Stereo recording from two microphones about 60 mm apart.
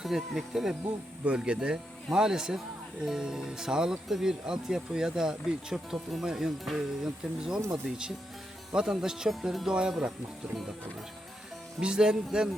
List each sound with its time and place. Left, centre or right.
0.0 s speech: centre
1.2 s speech: centre
1.5 s speech: centre
11.8 s speech: centre